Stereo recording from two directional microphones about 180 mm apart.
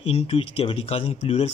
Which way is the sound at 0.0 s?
35° left (ahead or behind).